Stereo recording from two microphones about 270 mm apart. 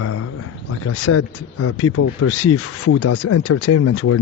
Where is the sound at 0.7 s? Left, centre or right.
Left.